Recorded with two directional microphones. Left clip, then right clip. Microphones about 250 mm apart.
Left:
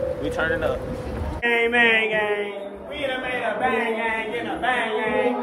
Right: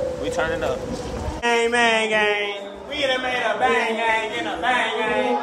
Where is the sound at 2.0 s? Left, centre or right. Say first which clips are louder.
Right 3 dB; right.